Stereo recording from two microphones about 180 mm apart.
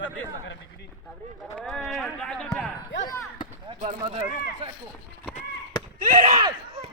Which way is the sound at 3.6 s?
40° right (ahead or behind).